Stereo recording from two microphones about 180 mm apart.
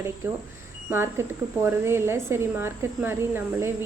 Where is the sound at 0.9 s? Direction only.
15° right (ahead or behind).